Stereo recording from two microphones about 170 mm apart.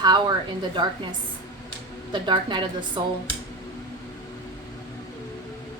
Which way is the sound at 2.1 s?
25° right (ahead or behind).